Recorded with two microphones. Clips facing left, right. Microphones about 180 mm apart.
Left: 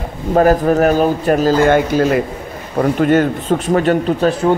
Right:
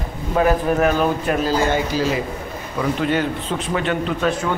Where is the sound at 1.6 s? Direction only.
55° left (ahead or behind).